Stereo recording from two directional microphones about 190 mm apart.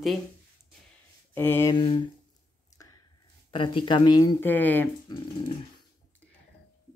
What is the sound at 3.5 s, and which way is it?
Speech, 25° left (ahead or behind).